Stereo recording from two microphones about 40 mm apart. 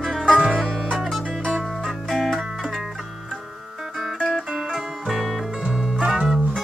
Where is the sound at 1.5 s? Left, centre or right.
Centre.